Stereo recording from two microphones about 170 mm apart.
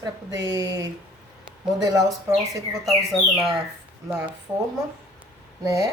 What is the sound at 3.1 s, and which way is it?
Speech, centre (ahead or behind).